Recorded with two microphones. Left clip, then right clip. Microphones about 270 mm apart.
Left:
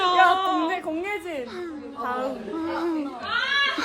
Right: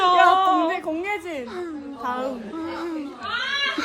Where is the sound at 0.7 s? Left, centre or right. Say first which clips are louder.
Right 2 dB; centre.